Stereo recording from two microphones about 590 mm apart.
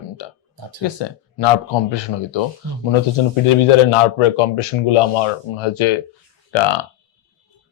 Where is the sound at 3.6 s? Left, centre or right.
Left.